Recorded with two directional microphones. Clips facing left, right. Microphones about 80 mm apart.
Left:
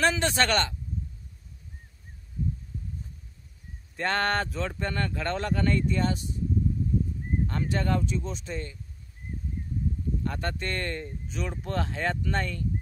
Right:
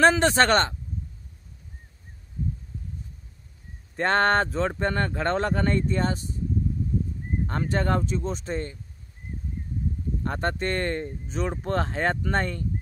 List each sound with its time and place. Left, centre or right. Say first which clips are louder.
0.0 s speech: right 6 dB; right
3.9 s speech: right 5 dB; right
7.4 s speech: right 4 dB; right
10.2 s speech: right 7 dB; right